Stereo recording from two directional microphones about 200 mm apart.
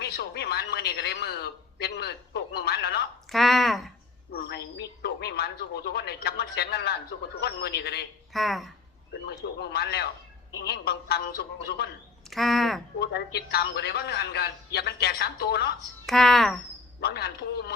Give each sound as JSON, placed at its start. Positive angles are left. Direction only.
{"t": 0.0, "sound": "a man's voice", "side_deg": 55}
{"t": 3.2, "sound": "speech", "side_deg": 0}
{"t": 4.3, "sound": "a man's voice", "side_deg": 50}
{"t": 8.3, "sound": "speech", "side_deg": 0}
{"t": 9.2, "sound": "a man's voice", "side_deg": 55}
{"t": 12.3, "sound": "speech", "side_deg": 0}
{"t": 13.0, "sound": "a man's voice", "side_deg": 55}
{"t": 16.0, "sound": "speech", "side_deg": 0}
{"t": 17.0, "sound": "a man's voice", "side_deg": 55}